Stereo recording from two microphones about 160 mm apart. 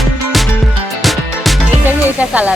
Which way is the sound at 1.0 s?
Centre (ahead or behind).